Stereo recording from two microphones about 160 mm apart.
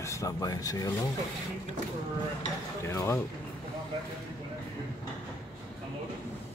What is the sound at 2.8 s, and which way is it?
Speech, 15° left (ahead or behind).